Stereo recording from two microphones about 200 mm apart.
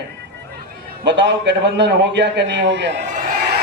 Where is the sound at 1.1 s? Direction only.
65° right (ahead or behind).